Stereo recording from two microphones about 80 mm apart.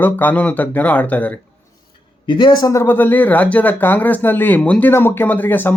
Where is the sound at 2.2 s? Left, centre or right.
Left.